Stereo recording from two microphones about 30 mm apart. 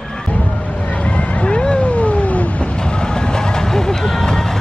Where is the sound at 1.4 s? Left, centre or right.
Left.